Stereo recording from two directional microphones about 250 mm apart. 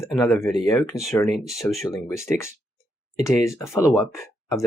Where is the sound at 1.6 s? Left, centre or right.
Centre.